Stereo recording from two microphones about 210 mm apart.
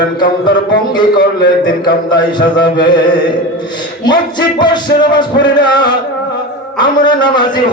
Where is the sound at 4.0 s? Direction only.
20° left (ahead or behind).